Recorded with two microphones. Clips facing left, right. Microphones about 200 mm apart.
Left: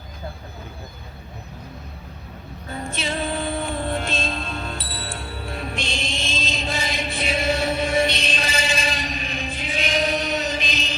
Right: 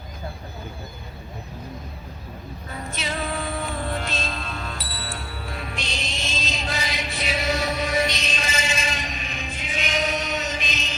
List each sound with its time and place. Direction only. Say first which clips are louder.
2.9 s music: left 2 dB; 30° left (ahead or behind)